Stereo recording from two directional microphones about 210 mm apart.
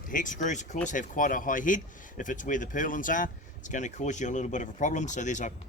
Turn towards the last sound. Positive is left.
turn(degrees=35)  # may be behind; listen again after turning